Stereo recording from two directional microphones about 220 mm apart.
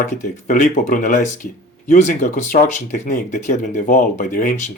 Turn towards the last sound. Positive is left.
turn(degrees=40)  # may be behind; listen again after turning